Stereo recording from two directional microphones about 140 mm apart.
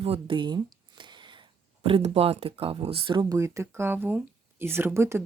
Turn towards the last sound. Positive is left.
turn(degrees=-20)  # may be behind; listen again after turning